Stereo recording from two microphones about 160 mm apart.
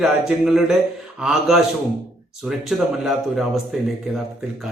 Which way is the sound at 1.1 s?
5° right (ahead or behind).